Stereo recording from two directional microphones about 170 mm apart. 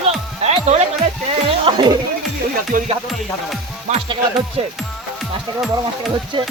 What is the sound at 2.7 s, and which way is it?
Music, 50° right (ahead or behind).